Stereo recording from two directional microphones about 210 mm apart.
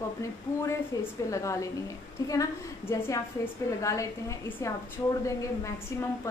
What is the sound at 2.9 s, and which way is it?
A woman's voice, 15° left (ahead or behind).